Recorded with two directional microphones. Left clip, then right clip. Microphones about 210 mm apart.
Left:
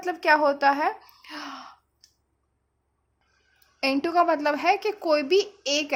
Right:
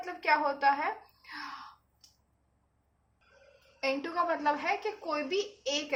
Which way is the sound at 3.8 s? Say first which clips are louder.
Left 9 dB; 55° left (ahead or behind).